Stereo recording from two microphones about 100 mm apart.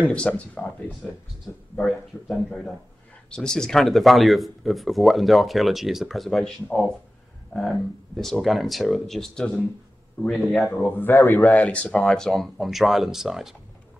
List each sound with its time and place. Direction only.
0.0 s speech: 10° left (ahead or behind)
1.8 s speech: centre (ahead or behind)
8.2 s speech: centre (ahead or behind)
10.8 s speech: 20° left (ahead or behind); by 13.6 s 5° right (ahead or behind)